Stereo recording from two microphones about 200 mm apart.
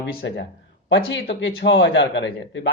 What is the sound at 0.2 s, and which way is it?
Speech, 55° left (ahead or behind).